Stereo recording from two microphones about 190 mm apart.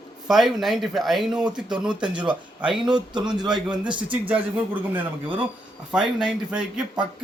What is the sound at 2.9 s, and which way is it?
Speech, 25° right (ahead or behind).